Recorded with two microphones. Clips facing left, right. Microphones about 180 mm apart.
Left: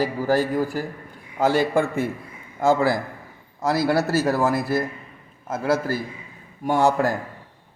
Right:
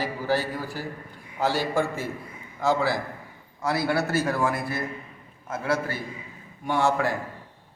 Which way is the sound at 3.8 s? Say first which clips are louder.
Left 4 dB; 40° left (ahead or behind).